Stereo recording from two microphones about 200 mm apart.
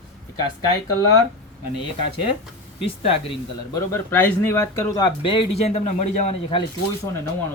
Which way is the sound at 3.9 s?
10° left (ahead or behind).